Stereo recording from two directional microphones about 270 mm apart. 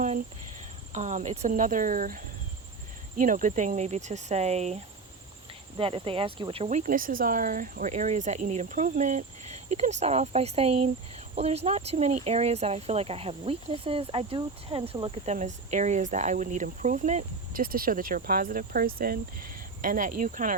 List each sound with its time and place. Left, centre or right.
0.9 s speech: right